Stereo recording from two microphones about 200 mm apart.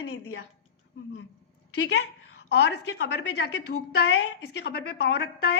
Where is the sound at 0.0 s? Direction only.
70° left (ahead or behind).